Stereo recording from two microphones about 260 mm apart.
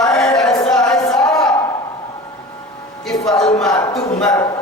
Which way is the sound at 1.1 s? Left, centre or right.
Centre.